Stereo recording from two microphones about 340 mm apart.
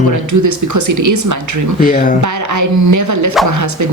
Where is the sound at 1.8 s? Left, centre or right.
Left.